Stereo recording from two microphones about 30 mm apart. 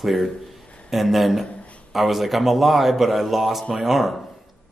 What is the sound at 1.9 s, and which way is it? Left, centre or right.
Speech, centre.